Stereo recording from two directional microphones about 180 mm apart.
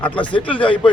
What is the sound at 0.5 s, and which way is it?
Speech, 30° left (ahead or behind).